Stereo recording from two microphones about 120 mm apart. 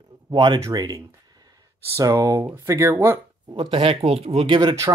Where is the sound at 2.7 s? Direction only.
25° right (ahead or behind).